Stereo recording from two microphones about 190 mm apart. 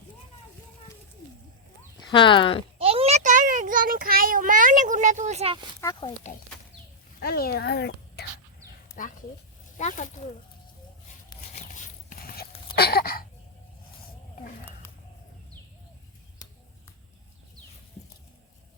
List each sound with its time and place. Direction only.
2.0 s speech: 25° left (ahead or behind)
2.7 s a child's voice: 30° right (ahead or behind)
5.8 s speech: 25° left (ahead or behind)
7.2 s speech: 55° left (ahead or behind)
9.0 s speech: 45° left (ahead or behind)
11.5 s a sound: 40° left (ahead or behind)
12.7 s a sound: 55° left (ahead or behind)